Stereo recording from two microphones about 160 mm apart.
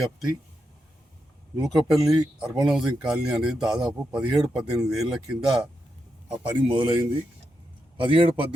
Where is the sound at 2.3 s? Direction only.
5° right (ahead or behind).